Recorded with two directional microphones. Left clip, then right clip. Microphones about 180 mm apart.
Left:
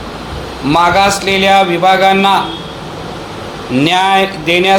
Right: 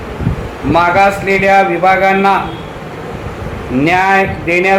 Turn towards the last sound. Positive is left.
turn(degrees=35)  # may be behind; listen again after turning